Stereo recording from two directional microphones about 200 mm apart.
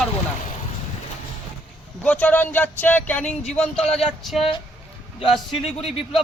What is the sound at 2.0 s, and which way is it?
Speech, 5° left (ahead or behind).